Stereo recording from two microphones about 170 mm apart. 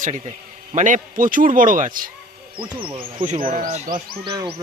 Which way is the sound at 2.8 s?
30° right (ahead or behind).